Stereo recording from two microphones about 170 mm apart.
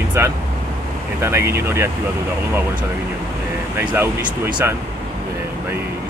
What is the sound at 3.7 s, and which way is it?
Speech, 15° right (ahead or behind).